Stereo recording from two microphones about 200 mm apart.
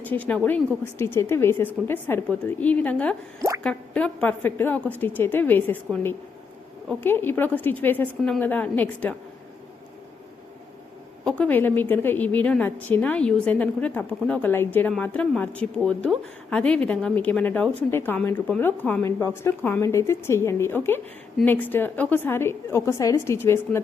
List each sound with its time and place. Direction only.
0.0 s a woman's voice: 10° left (ahead or behind)
11.3 s a woman's voice: 5° left (ahead or behind)